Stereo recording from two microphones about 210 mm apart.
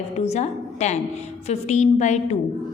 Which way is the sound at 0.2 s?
30° left (ahead or behind).